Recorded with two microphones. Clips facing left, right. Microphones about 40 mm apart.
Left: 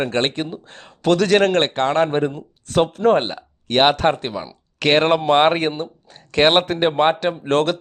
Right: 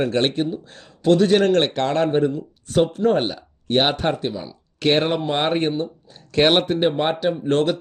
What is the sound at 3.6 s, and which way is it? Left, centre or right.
Speech, left.